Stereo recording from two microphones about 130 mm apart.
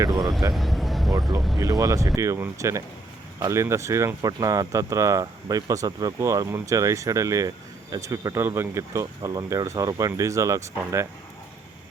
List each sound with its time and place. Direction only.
0.0 s speech: 35° right (ahead or behind)
0.5 s a sound: centre (ahead or behind)
1.5 s speech: 30° right (ahead or behind)